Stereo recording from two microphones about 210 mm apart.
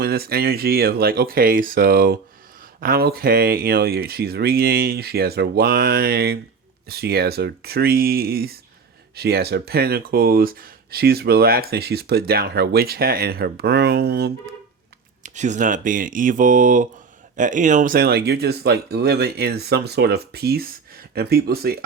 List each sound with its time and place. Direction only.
0.0 s speech: 45° right (ahead or behind)
15.2 s speech: 35° right (ahead or behind)